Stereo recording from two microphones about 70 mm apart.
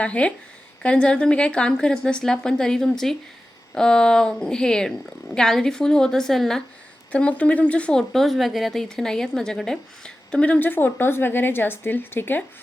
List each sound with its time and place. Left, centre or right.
0.0 s a woman's voice: centre
7.1 s a woman's voice: centre
8.1 s a woman's voice: centre; by 12.4 s left